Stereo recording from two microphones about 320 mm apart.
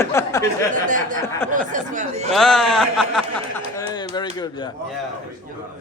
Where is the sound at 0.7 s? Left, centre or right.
Right.